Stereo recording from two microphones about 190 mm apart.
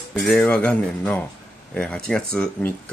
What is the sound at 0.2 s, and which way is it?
Speech, centre (ahead or behind).